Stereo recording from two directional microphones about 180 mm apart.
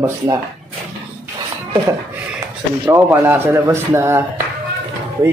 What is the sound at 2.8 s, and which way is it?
Speech, 10° right (ahead or behind).